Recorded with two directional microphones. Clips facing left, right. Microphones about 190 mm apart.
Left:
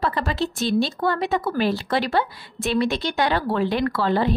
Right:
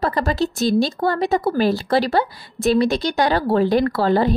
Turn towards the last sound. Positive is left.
turn(degrees=-40)  # may be behind; listen again after turning